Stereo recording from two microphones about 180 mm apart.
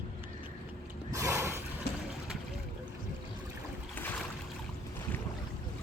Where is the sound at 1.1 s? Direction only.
15° right (ahead or behind).